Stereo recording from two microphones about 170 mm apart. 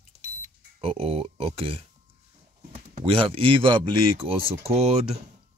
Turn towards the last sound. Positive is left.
turn(degrees=-35)  # may be behind; listen again after turning